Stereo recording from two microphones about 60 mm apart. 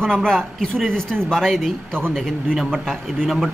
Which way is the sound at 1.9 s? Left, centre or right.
Right.